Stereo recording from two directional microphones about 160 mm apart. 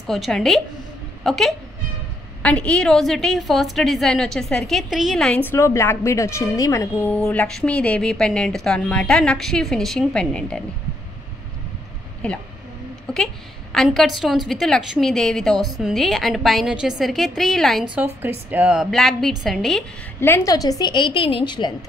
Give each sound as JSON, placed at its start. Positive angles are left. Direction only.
{"t": 0.0, "sound": "a woman's voice", "side_deg": 0}
{"t": 13.1, "sound": "a woman's voice", "side_deg": 5}
{"t": 17.9, "sound": "a woman's voice", "side_deg": -15}
{"t": 20.2, "sound": "a woman's voice", "side_deg": 15}